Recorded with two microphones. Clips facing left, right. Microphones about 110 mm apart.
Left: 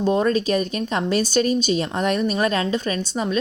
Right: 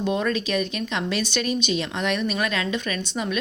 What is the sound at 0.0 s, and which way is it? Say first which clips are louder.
Speech: left 5 dB; 35° left (ahead or behind).